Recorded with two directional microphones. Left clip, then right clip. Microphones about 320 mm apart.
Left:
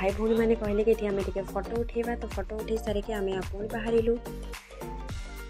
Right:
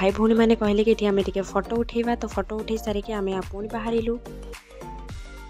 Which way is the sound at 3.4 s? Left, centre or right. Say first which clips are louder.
Right 3 dB; centre.